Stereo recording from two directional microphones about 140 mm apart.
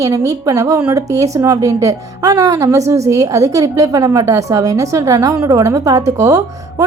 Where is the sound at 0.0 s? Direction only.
25° right (ahead or behind).